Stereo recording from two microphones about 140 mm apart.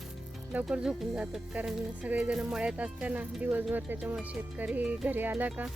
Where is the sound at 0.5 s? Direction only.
5° right (ahead or behind).